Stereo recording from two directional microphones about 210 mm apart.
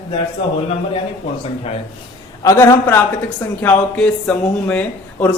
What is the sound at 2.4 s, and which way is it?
A woman's voice, 15° left (ahead or behind).